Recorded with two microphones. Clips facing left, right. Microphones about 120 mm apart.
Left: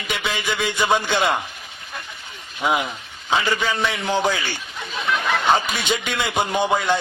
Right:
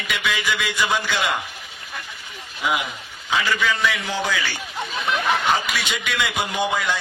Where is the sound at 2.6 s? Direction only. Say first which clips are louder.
Left 3 dB; 30° left (ahead or behind).